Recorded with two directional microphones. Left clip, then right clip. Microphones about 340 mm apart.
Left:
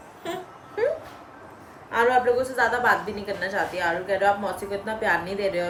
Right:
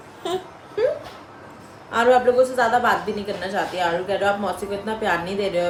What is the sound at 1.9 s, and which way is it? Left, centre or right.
A woman's voice, centre.